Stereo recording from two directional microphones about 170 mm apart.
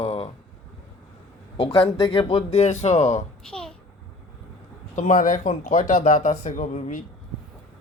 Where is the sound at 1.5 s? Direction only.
35° left (ahead or behind).